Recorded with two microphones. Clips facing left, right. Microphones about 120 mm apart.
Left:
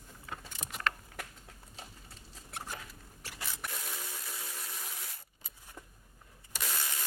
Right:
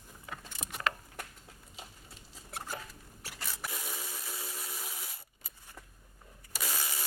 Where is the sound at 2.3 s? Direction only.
5° right (ahead or behind).